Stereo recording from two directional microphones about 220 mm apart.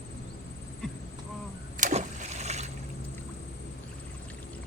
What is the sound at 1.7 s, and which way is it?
Vehicle, 35° right (ahead or behind).